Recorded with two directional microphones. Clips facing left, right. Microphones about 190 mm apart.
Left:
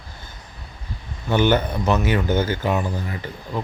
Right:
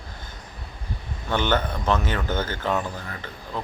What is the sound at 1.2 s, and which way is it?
Speech, 10° left (ahead or behind).